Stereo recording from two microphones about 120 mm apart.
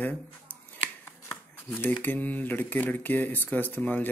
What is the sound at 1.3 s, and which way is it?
Shuffling cards, 15° left (ahead or behind).